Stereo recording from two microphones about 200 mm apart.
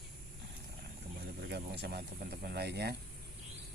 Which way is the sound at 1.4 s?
55° right (ahead or behind).